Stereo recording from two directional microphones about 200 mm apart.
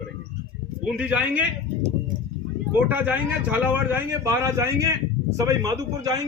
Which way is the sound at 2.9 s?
10° right (ahead or behind).